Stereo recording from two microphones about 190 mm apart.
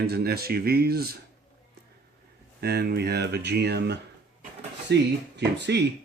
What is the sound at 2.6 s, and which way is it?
Speech, 55° right (ahead or behind).